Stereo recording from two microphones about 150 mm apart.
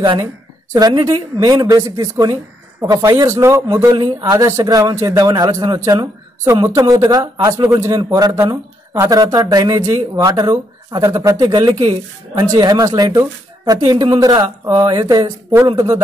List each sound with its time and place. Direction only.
0.0 s a woman's voice: 30° right (ahead or behind)